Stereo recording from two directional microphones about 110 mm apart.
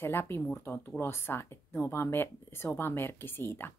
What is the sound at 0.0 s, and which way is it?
Speech, 20° left (ahead or behind).